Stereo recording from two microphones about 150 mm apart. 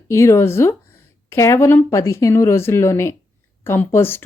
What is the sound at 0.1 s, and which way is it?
A woman's voice, 20° left (ahead or behind).